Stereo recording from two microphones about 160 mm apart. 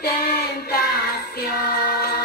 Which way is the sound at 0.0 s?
75° left (ahead or behind).